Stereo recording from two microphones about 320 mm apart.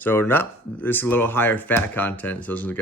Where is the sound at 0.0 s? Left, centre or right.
Centre.